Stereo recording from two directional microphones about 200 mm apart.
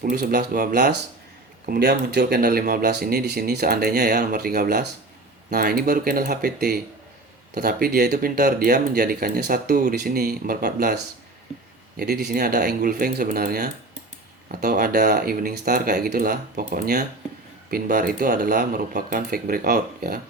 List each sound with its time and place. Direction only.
0.0 s speech: 45° right (ahead or behind)
11.9 s speech: 50° right (ahead or behind)